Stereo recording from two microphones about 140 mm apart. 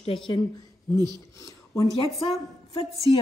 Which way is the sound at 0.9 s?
30° right (ahead or behind).